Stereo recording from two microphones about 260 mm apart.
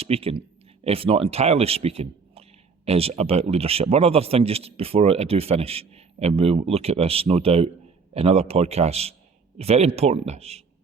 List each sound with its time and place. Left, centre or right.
0.0 s speech: right